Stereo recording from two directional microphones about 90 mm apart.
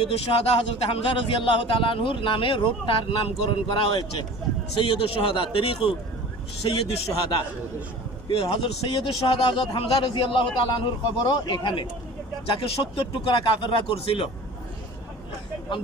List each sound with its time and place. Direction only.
0.1 s a man's voice: 90° left
4.8 s a man's voice: 90° left
6.9 s a man's voice: 60° left (ahead or behind)
8.4 s a man's voice: 85° left; by 11.9 s 60° left (ahead or behind)
12.4 s a man's voice: 90° left